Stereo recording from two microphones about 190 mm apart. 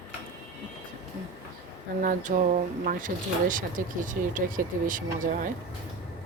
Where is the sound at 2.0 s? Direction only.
45° right (ahead or behind).